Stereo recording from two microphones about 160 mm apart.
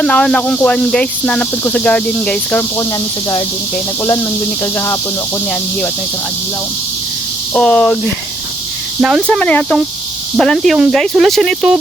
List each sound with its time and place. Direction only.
0.0 s speech: 5° left (ahead or behind)
4.0 s speech: 15° left (ahead or behind)
7.5 s speech: 5° left (ahead or behind)
9.2 s speech: 5° left (ahead or behind)